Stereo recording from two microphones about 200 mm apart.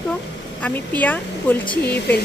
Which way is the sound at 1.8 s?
55° left (ahead or behind).